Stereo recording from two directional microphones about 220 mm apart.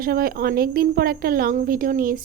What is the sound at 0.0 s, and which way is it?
A woman's voice, 40° right (ahead or behind).